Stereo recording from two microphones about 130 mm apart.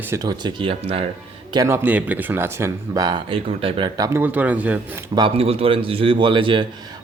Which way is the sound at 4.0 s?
20° right (ahead or behind).